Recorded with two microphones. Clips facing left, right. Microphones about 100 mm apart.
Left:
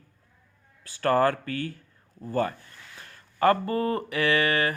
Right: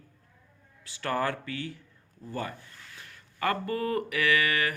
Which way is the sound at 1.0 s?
45° left (ahead or behind).